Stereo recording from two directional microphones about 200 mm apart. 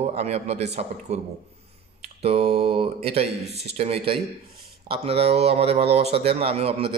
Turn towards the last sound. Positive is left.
turn(degrees=-30)  # may be behind; listen again after turning